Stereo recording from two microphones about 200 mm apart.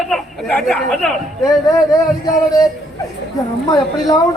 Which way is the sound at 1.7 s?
15° left (ahead or behind).